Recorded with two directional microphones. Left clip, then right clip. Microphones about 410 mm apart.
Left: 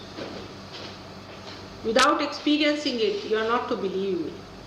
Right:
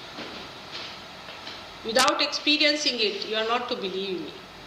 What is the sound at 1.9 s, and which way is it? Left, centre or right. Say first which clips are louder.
A woman's voice: left 1 dB; left.